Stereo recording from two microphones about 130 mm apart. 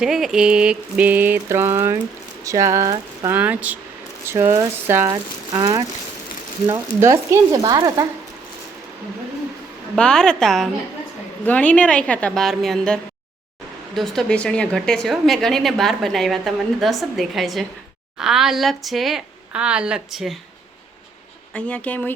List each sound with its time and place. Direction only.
0.0 s a sound: 5° right (ahead or behind); by 2.0 s 20° right (ahead or behind)
2.4 s speech: 25° right (ahead or behind)
3.3 s a sound: 10° right (ahead or behind)
4.3 s speech: 20° right (ahead or behind)
5.0 s speech: 30° right (ahead or behind)
6.7 s speech: 20° right (ahead or behind)
9.9 s a woman's voice: 5° left (ahead or behind)
21.5 s a woman's voice: 10° left (ahead or behind)